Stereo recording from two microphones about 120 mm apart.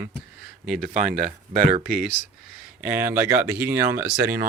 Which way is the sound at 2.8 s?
20° right (ahead or behind).